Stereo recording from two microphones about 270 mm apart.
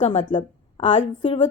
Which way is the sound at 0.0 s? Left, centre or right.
Centre.